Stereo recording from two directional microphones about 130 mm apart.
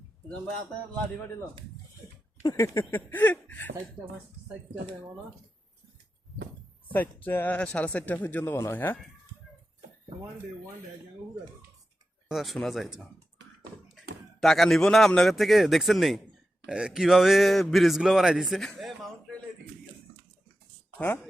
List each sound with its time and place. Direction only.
2.4 s a sound: 25° left (ahead or behind)
3.1 s speech: 15° left (ahead or behind)
6.9 s speech: 15° left (ahead or behind)
12.3 s a man's voice: centre (ahead or behind)
14.4 s a man's voice: centre (ahead or behind)